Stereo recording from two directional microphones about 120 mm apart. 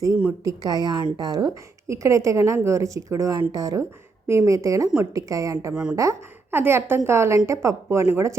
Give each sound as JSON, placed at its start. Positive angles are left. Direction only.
{"t": 0.4, "sound": "a woman's voice", "side_deg": -30}
{"t": 5.7, "sound": "a woman's voice", "side_deg": -5}
{"t": 6.0, "sound": "a woman's voice", "side_deg": -25}